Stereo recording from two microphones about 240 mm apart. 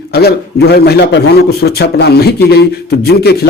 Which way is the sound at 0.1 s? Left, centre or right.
Left.